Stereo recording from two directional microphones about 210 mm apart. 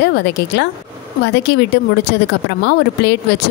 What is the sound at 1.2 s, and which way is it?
Speech, 55° left (ahead or behind).